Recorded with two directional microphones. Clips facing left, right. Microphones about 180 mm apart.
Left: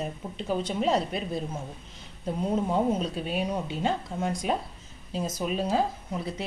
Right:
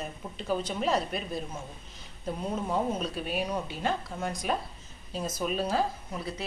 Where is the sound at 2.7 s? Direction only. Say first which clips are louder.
Left 4 dB; 25° left (ahead or behind).